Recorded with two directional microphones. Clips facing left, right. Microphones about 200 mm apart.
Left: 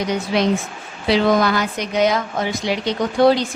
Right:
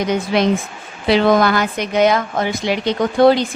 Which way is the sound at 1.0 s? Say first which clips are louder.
Right 3 dB; 55° right (ahead or behind).